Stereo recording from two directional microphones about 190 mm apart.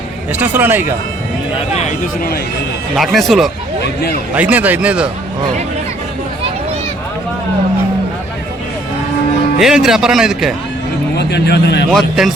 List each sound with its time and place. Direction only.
0.3 s a man's voice: 10° right (ahead or behind)
1.8 s speech: 45° left (ahead or behind)
2.9 s a man's voice: centre (ahead or behind)
9.6 s speech: centre (ahead or behind)
11.2 s speech: 60° left (ahead or behind)
11.9 s speech: centre (ahead or behind)